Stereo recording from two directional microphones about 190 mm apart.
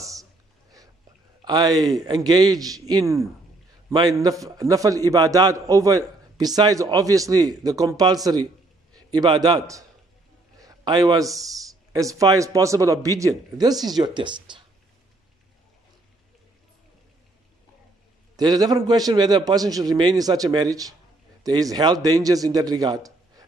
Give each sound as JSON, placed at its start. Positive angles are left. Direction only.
{"t": 0.0, "sound": "a sound", "side_deg": -15}
{"t": 1.4, "sound": "a man's voice", "side_deg": -20}
{"t": 18.3, "sound": "a man's voice", "side_deg": -20}